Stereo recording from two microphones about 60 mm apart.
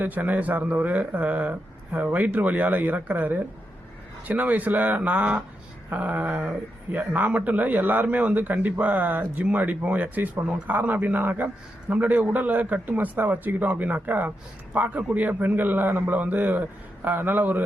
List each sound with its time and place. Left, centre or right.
0.0 s speech: right